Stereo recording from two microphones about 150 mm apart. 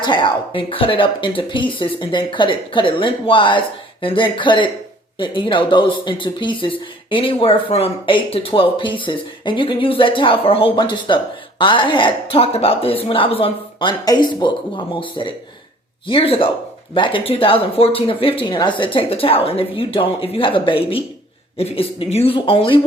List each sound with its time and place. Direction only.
0.0 s speech: 30° left (ahead or behind)